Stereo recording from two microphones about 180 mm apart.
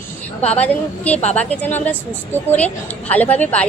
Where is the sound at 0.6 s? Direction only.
10° left (ahead or behind).